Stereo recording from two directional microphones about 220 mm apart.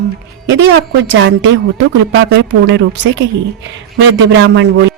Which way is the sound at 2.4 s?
55° right (ahead or behind).